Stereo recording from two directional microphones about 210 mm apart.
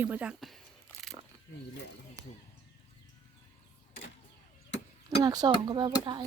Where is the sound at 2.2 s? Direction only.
15° right (ahead or behind).